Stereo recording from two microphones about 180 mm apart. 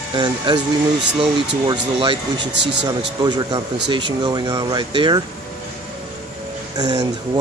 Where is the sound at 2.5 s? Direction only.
75° right (ahead or behind).